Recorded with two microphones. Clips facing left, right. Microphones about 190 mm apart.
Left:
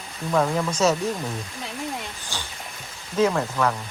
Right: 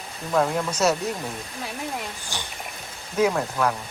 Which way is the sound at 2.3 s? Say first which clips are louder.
Right 1 dB; 15° right (ahead or behind).